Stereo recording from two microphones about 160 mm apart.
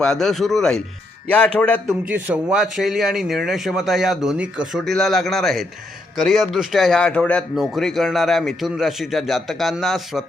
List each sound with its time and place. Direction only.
0.0 s a man's voice: 5° left (ahead or behind)
2.0 s speech: 10° right (ahead or behind)